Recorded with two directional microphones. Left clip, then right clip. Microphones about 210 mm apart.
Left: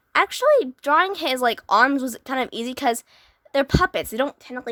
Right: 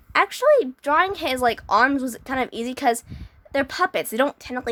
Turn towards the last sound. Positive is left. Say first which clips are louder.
# right 3 dB
turn(degrees=5)  # may be behind; listen again after turning